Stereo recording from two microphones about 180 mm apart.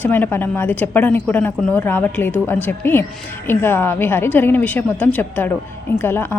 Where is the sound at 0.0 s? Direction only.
10° left (ahead or behind).